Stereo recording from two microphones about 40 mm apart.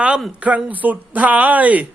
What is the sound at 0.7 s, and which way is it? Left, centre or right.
Speech, right.